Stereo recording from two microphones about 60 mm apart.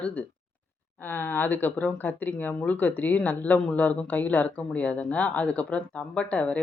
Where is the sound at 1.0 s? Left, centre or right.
Left.